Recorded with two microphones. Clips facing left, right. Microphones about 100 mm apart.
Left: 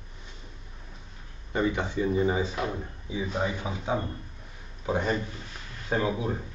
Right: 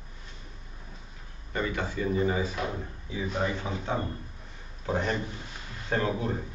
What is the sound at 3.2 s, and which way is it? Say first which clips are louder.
A man's voice: even; 10° left (ahead or behind).